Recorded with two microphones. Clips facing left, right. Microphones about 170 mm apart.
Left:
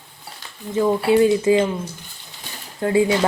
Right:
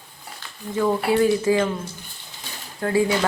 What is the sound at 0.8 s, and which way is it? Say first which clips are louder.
Speech: left 3 dB; 20° left (ahead or behind).